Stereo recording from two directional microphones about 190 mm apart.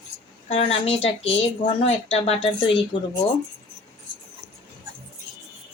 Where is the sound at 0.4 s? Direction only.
30° left (ahead or behind).